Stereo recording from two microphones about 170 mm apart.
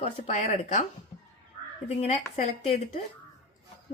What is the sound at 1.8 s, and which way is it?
Speech, 35° left (ahead or behind).